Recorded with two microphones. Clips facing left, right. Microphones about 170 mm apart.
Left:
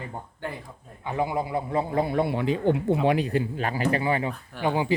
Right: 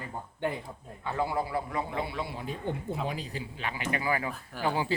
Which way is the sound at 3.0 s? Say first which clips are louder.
Left 12 dB; 70° left (ahead or behind).